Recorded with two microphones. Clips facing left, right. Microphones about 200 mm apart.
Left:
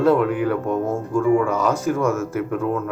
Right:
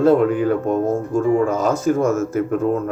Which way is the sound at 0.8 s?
40° right (ahead or behind).